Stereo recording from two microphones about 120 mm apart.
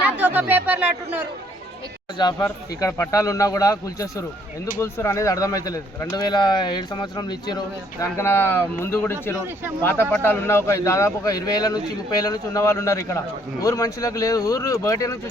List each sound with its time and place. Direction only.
0.0 s speech: 15° right (ahead or behind)
2.1 s a man's voice: 35° left (ahead or behind)
8.0 s a man's voice: 20° left (ahead or behind)